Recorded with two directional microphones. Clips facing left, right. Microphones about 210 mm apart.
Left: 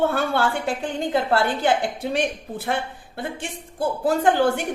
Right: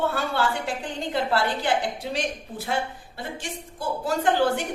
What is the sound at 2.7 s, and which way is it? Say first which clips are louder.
Speech: left 2 dB; 55° left (ahead or behind).